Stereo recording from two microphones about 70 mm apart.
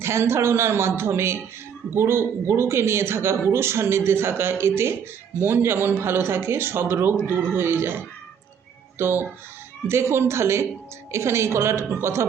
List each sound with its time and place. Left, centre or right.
0.0 s speech: right